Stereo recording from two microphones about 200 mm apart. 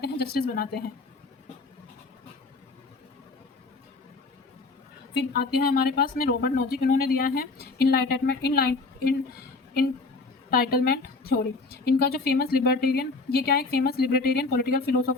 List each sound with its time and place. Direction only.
0.0 s speech: 50° left (ahead or behind)
5.3 s speech: 50° left (ahead or behind)
10.5 s a woman's voice: 50° left (ahead or behind)